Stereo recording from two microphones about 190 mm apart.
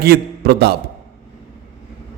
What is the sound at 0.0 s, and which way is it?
Speech, 55° right (ahead or behind).